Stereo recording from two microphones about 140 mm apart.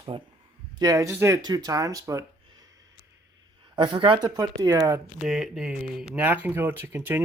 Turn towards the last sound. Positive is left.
turn(degrees=-15)  # may be behind; listen again after turning